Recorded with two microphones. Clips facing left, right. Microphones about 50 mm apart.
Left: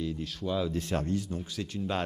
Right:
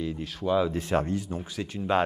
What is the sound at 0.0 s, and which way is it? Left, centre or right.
Speech, centre.